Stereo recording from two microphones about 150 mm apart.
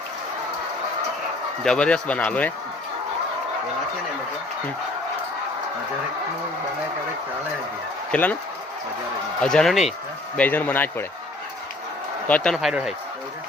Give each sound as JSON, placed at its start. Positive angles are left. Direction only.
{"t": 1.6, "sound": "speech", "side_deg": 5}
{"t": 8.1, "sound": "speech", "side_deg": 10}
{"t": 9.4, "sound": "speech", "side_deg": 5}
{"t": 10.3, "sound": "speech", "side_deg": 10}
{"t": 12.3, "sound": "speech", "side_deg": 5}
{"t": 12.5, "sound": "speech", "side_deg": -5}